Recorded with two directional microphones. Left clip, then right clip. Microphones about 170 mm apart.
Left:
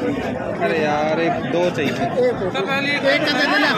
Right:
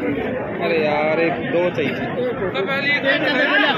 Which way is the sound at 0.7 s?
65° left (ahead or behind).